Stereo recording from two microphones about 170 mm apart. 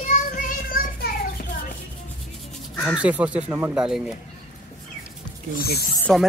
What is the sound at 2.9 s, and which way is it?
Speech, 10° right (ahead or behind).